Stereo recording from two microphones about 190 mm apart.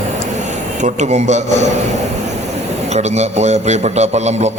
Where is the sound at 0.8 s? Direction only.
40° right (ahead or behind).